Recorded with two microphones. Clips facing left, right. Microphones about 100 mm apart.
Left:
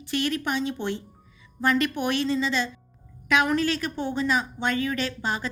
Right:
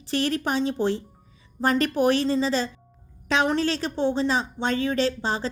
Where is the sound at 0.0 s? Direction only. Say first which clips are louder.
Right 2 dB; 35° right (ahead or behind).